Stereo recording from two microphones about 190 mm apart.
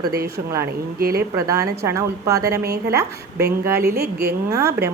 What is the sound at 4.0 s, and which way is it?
Speech, 55° right (ahead or behind).